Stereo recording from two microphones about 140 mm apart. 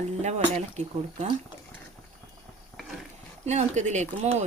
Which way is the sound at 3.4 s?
55° right (ahead or behind).